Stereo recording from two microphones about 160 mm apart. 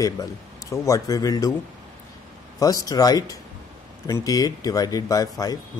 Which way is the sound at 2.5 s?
20° left (ahead or behind).